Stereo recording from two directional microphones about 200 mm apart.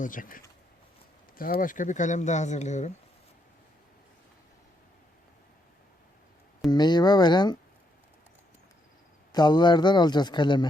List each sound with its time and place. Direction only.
0.0 s speech: 40° left (ahead or behind)
6.7 s speech: 20° left (ahead or behind)
9.3 s speech: 20° left (ahead or behind)